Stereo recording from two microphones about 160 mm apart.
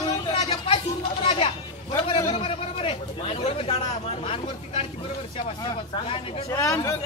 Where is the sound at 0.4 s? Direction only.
35° left (ahead or behind).